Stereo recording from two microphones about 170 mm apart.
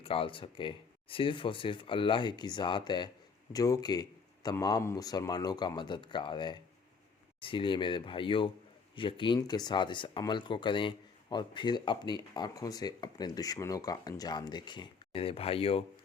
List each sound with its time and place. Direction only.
0.0 s speech: 35° left (ahead or behind)